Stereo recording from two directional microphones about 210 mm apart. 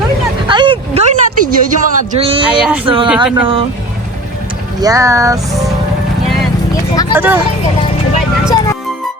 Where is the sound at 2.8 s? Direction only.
25° right (ahead or behind).